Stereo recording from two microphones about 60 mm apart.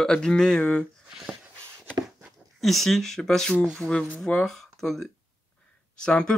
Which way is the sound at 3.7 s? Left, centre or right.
Left.